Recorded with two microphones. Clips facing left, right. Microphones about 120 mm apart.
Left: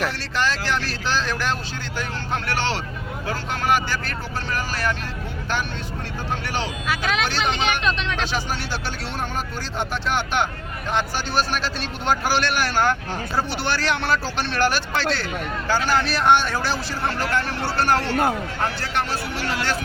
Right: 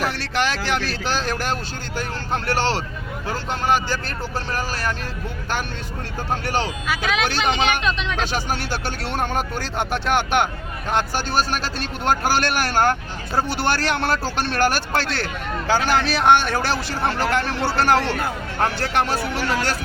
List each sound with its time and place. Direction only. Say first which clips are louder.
0.2 s a sound: right 1 dB; 65° right (ahead or behind); by 1.5 s 45° right (ahead or behind)
2.0 s speech: right 2 dB; 40° right (ahead or behind)
6.4 s speech: right 6 dB; 40° right (ahead or behind)
6.8 s speech: right 1 dB; centre (ahead or behind)
8.2 s speech: right 2 dB; 50° right (ahead or behind)
10.9 s speech: right 2 dB; 45° right (ahead or behind); by 18.2 s 75° right (ahead or behind)
18.6 s speech: right 6 dB; 60° right (ahead or behind)